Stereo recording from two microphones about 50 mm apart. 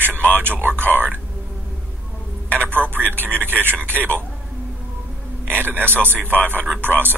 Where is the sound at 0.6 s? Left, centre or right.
Right.